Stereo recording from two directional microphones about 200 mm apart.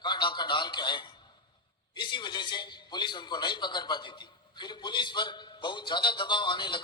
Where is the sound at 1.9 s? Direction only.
25° left (ahead or behind).